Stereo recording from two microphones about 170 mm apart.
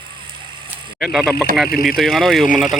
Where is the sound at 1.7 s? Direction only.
60° left (ahead or behind).